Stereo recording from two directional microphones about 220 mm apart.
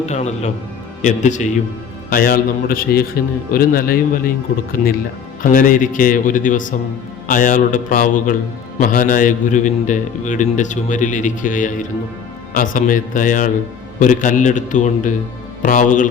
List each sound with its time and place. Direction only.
0.0 s a man's voice: 30° left (ahead or behind)